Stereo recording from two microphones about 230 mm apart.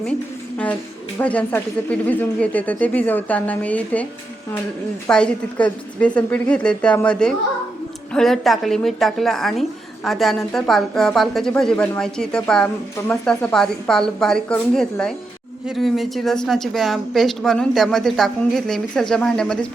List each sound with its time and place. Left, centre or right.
1.2 s speech: centre
5.0 s a woman's voice: centre